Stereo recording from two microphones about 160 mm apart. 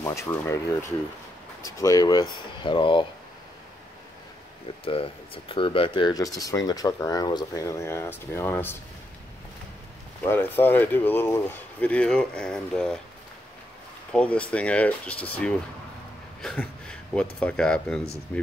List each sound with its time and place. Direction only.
0.0 s speech: 15° left (ahead or behind)
1.6 s speech: 20° left (ahead or behind)
4.8 s speech: 35° left (ahead or behind); by 8.7 s 15° left (ahead or behind)
10.2 s speech: 15° left (ahead or behind)
14.1 s speech: 10° left (ahead or behind)